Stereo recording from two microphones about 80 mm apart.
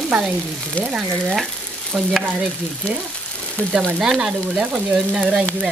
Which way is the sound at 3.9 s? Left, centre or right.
Centre.